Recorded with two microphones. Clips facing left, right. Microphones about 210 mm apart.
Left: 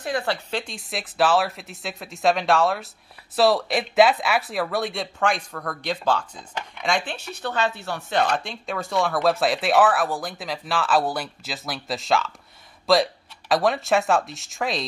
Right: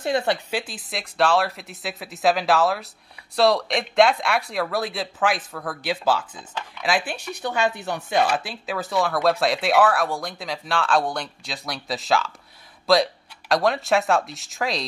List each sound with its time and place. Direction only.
0.0 s speech: 20° right (ahead or behind)
0.5 s speech: 5° right (ahead or behind)